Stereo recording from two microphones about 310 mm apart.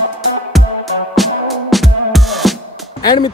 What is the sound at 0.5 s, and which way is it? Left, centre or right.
Music, centre.